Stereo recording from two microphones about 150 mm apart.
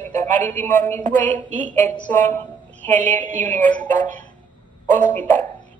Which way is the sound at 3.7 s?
10° left (ahead or behind).